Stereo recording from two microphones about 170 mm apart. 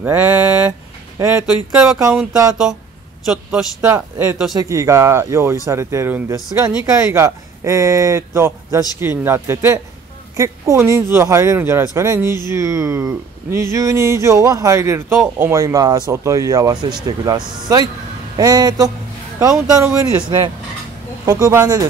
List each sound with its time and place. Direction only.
0.0 s speech: 10° right (ahead or behind)
20.2 s speech: 25° right (ahead or behind)